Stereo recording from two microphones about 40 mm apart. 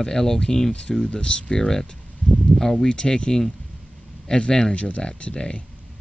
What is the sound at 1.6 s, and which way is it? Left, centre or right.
Speech, centre.